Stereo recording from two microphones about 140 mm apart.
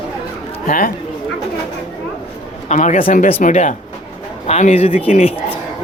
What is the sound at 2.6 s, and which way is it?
A man's voice, 60° left (ahead or behind).